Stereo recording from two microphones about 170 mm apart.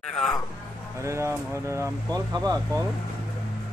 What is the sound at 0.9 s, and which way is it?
Mantra, 15° right (ahead or behind).